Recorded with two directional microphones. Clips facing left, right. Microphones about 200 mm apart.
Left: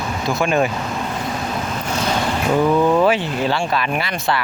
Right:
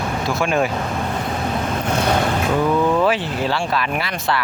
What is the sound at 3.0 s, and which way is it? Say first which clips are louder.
Speech: left 2 dB; centre (ahead or behind).